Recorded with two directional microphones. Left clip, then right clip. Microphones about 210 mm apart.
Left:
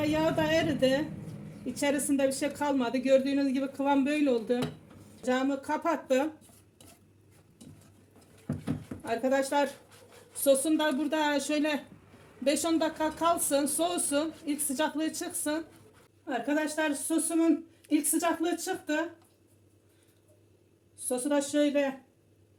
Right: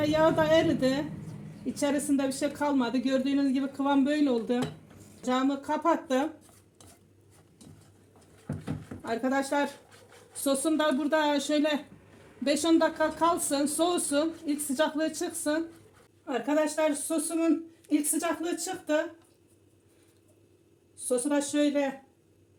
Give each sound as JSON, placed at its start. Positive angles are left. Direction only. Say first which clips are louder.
{"t": 0.0, "sound": "a man's voice", "louder": "right 4 dB", "side_deg": -20}
{"t": 9.0, "sound": "speech", "louder": "left 1 dB", "side_deg": -20}
{"t": 21.1, "sound": "a man's voice", "louder": "right 1 dB", "side_deg": -20}